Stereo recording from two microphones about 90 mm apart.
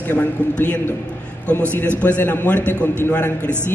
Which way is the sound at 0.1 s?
15° left (ahead or behind).